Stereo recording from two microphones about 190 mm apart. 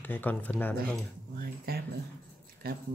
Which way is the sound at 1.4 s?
50° right (ahead or behind).